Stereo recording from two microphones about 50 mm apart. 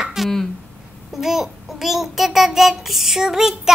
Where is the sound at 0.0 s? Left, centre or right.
Centre.